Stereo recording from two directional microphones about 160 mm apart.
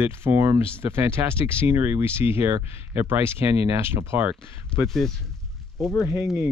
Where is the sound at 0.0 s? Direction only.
15° right (ahead or behind).